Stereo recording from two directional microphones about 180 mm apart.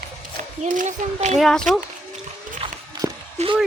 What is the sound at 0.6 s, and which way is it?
Speech, 40° right (ahead or behind).